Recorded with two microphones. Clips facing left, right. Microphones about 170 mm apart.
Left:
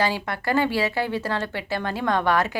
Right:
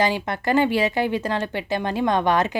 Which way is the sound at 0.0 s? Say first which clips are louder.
Right 3 dB; 20° right (ahead or behind).